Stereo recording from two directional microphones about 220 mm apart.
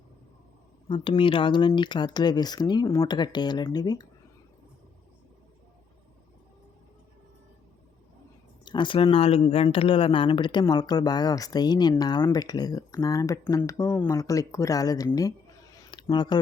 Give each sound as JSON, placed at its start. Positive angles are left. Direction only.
{"t": 0.9, "sound": "speech", "side_deg": 20}
{"t": 8.6, "sound": "speech", "side_deg": 20}
{"t": 15.7, "sound": "a sound", "side_deg": 20}